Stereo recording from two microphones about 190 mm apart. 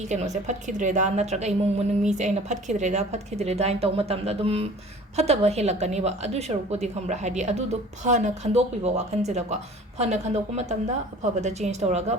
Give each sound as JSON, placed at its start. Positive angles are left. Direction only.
{"t": 0.1, "sound": "a woman's voice", "side_deg": -40}